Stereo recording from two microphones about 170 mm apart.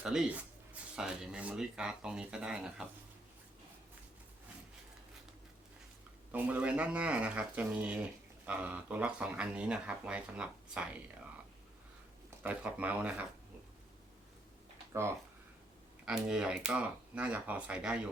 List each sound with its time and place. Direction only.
0.0 s speech: 5° right (ahead or behind)
6.3 s speech: 10° right (ahead or behind)
12.4 s speech: 10° right (ahead or behind)
16.0 s speech: 5° right (ahead or behind)